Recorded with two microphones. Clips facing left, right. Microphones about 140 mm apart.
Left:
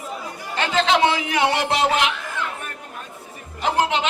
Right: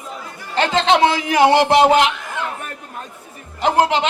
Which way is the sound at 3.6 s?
35° right (ahead or behind).